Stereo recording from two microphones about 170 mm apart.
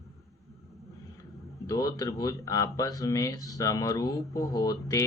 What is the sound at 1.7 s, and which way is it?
Speech, 20° left (ahead or behind).